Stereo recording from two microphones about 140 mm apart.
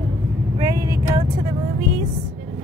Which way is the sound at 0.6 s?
25° right (ahead or behind).